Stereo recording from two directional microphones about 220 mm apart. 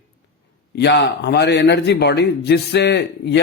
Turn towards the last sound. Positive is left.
turn(degrees=50)  # may be behind; listen again after turning